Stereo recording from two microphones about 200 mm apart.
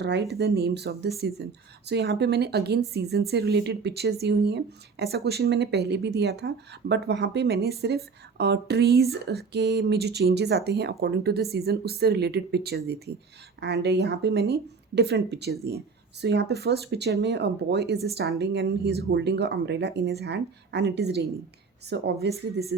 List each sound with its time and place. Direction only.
0.0 s speech: 55° right (ahead or behind)